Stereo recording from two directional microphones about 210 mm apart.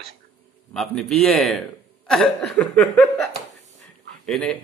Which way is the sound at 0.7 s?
Centre (ahead or behind).